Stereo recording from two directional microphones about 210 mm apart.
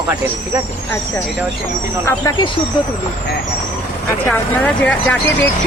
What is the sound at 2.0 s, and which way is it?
Speech, 15° left (ahead or behind).